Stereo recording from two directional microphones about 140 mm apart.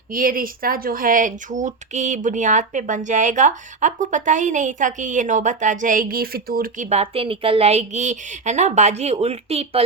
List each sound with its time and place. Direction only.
0.1 s speech: 85° right
6.8 s speech: 50° right (ahead or behind)